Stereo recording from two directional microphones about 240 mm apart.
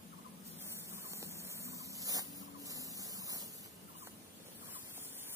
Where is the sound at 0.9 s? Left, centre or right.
Centre.